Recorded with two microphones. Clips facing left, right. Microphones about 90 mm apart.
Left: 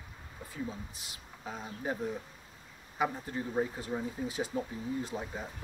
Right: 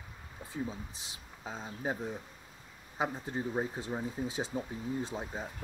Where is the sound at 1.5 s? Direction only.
25° right (ahead or behind).